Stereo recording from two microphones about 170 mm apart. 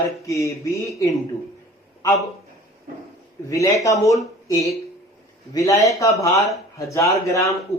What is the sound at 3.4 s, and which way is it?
Speech, 20° left (ahead or behind).